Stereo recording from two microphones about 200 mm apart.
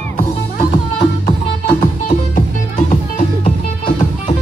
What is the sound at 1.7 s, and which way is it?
Music, 45° left (ahead or behind).